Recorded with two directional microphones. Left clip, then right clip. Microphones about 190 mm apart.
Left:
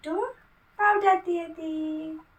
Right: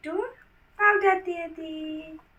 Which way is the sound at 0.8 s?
25° left (ahead or behind).